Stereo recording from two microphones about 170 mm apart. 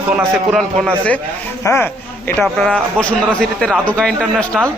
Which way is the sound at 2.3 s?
5° left (ahead or behind).